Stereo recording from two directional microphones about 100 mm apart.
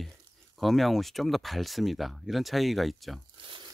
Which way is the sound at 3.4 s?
55° right (ahead or behind).